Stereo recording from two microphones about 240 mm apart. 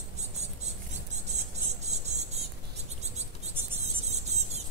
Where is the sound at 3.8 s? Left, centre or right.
Right.